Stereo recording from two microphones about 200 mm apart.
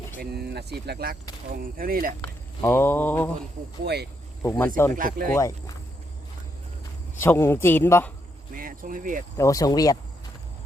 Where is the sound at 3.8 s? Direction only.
55° right (ahead or behind).